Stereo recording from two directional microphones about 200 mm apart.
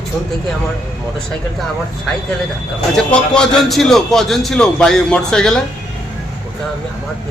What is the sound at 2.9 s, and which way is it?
A man's voice, 5° left (ahead or behind).